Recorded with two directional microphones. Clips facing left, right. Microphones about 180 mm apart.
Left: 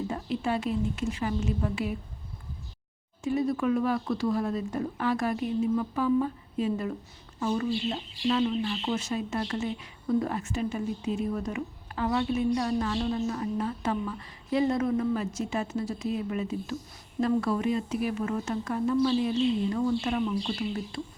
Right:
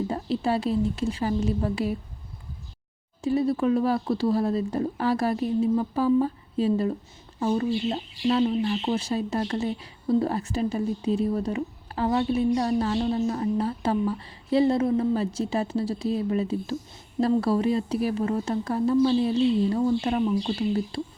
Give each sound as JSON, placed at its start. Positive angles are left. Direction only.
{"t": 0.1, "sound": "speech", "side_deg": -35}
{"t": 3.2, "sound": "speech", "side_deg": -35}